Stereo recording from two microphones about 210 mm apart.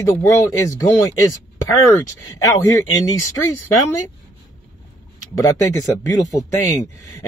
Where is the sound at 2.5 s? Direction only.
15° left (ahead or behind).